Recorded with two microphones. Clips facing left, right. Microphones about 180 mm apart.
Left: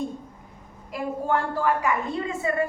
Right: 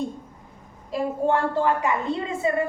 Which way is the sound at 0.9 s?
25° right (ahead or behind).